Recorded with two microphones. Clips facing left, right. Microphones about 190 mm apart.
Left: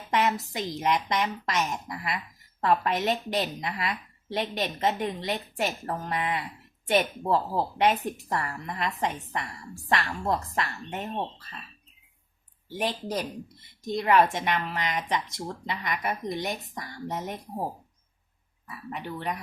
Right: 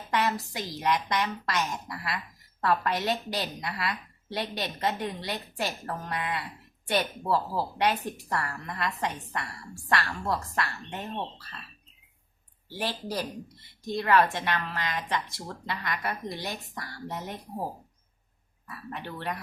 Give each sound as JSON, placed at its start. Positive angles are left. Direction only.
{"t": 0.1, "sound": "a woman's voice", "side_deg": 20}
{"t": 12.7, "sound": "a woman's voice", "side_deg": 20}
{"t": 18.9, "sound": "speech", "side_deg": 15}